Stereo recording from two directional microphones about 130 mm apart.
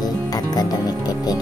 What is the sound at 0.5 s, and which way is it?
Music, 30° left (ahead or behind).